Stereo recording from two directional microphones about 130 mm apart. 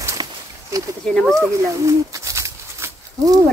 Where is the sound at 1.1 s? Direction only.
Centre (ahead or behind).